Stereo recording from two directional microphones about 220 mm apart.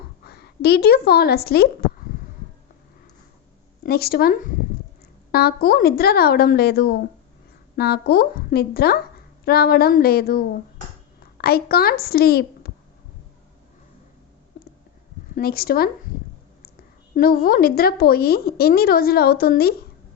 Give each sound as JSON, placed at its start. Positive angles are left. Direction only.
{"t": 0.3, "sound": "a woman's voice", "side_deg": 45}
{"t": 3.8, "sound": "a woman's voice", "side_deg": 45}
{"t": 15.4, "sound": "speech", "side_deg": 45}
{"t": 17.2, "sound": "speech", "side_deg": 40}